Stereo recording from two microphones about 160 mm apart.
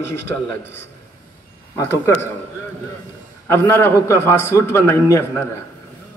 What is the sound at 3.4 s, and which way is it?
A man's voice, 15° left (ahead or behind).